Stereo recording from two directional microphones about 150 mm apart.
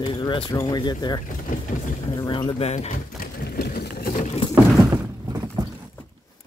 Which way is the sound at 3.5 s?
90° left.